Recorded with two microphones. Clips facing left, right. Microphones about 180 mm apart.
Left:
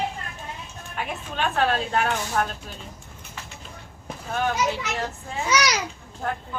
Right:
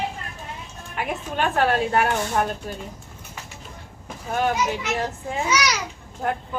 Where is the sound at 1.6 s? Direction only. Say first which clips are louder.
Right 3 dB; 10° right (ahead or behind).